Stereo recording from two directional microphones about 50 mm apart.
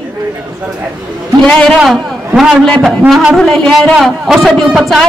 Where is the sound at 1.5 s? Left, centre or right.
Left.